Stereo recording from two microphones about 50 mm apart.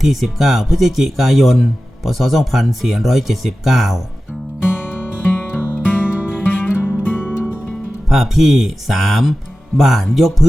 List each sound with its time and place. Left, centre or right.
0.1 s speech: centre
4.6 s music: left
8.1 s speech: centre